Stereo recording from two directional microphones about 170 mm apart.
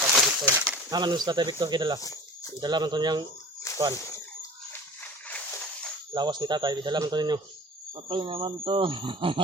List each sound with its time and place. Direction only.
0.0 s a sound: 10° right (ahead or behind)
0.9 s speech: 25° right (ahead or behind)
5.3 s dog: 10° left (ahead or behind)
6.1 s speech: 25° right (ahead or behind)